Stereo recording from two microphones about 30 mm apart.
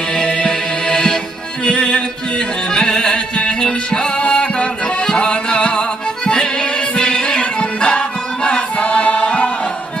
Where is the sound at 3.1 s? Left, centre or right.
Left.